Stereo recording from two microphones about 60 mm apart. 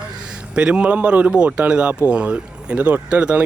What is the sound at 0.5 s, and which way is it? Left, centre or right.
Speech, centre.